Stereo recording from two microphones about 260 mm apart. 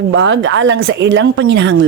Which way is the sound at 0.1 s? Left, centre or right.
Right.